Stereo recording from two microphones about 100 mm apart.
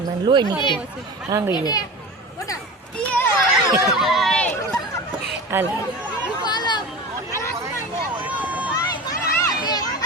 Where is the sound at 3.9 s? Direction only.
Centre (ahead or behind).